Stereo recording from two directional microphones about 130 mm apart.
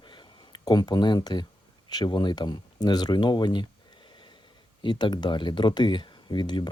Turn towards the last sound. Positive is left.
turn(degrees=35)  # may be behind; listen again after turning